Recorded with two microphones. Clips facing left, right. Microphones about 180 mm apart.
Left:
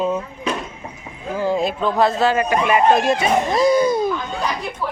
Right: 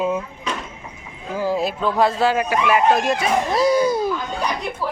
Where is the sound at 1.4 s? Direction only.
5° right (ahead or behind).